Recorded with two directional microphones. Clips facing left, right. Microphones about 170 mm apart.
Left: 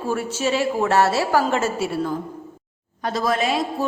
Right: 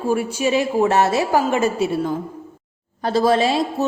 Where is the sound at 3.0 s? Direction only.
30° right (ahead or behind).